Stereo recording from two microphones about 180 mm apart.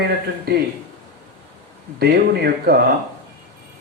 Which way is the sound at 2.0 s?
60° right (ahead or behind).